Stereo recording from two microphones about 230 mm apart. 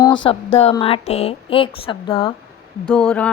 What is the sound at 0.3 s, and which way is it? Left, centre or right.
Speech, left.